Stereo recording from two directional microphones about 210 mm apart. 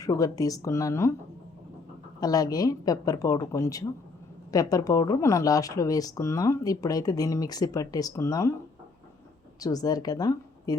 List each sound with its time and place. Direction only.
0.0 s speech: 15° left (ahead or behind)
2.2 s speech: 15° left (ahead or behind)
9.6 s a woman's voice: 15° left (ahead or behind)